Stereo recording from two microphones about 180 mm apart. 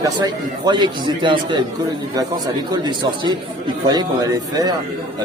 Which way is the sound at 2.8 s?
25° right (ahead or behind).